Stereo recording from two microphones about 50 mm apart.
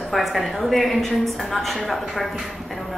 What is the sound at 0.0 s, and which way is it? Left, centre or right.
A woman's voice, centre.